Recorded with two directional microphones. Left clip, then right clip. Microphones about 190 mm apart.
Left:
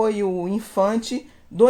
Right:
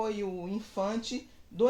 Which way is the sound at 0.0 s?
50° left (ahead or behind).